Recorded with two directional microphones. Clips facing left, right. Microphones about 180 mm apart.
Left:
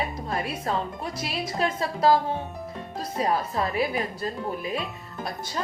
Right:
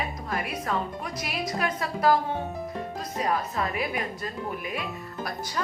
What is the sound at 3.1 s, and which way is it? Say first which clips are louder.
Speech: left 2 dB; 30° left (ahead or behind).